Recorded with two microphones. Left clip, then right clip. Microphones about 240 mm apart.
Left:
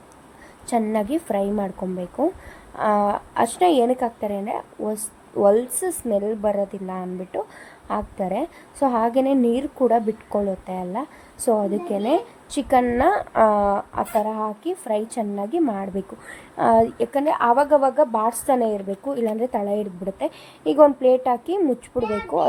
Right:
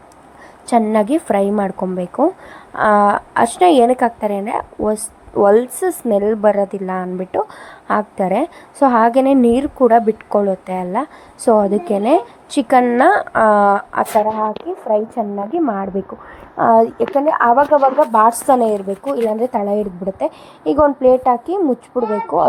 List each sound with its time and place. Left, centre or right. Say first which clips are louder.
0.7 s a woman's voice: right 8 dB; centre